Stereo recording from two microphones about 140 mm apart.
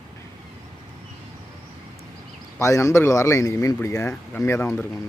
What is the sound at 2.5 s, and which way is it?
Speech, 20° left (ahead or behind).